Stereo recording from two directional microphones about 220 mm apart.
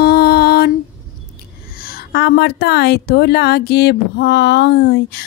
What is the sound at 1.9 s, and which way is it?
A woman's voice, 50° left (ahead or behind).